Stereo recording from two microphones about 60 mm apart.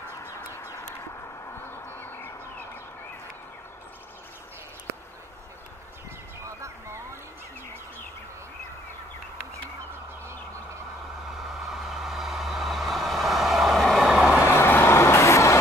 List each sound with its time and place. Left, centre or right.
1.9 s music: left
11.7 s vehicle: centre
14.0 s vehicle: centre
14.5 s vehicle: left